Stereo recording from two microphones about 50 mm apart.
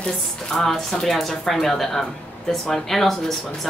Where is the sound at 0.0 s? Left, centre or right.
Centre.